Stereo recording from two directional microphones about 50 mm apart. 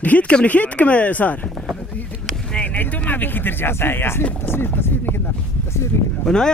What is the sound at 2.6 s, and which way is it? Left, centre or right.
Speech, left.